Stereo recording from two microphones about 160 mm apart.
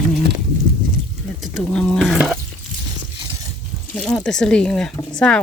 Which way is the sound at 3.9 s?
5° left (ahead or behind).